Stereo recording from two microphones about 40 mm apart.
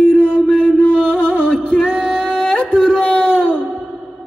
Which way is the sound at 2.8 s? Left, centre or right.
Left.